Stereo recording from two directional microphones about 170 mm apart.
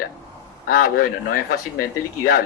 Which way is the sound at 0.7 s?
60° left (ahead or behind).